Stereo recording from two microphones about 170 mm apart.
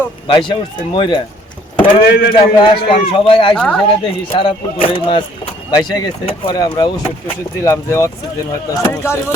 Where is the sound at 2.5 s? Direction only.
30° left (ahead or behind).